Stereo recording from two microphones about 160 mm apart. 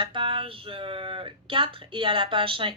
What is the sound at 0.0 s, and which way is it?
Speech, 35° right (ahead or behind).